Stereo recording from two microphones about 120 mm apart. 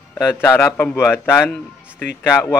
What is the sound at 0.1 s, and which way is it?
A man's voice, 20° left (ahead or behind).